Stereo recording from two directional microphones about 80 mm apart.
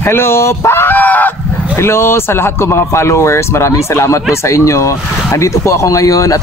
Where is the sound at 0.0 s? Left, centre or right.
Left.